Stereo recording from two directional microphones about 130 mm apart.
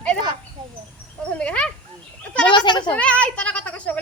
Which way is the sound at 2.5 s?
35° left (ahead or behind).